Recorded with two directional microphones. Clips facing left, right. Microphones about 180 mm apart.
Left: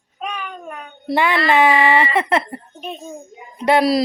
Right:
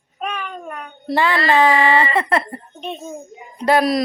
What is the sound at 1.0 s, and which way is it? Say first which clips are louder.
Speech: even; 20° left (ahead or behind).